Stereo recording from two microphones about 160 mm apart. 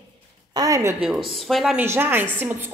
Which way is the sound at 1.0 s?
Centre (ahead or behind).